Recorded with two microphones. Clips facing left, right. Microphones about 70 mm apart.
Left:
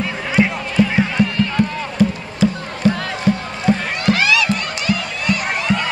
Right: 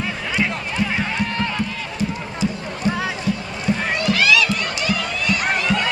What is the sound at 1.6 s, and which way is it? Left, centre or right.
Run, left.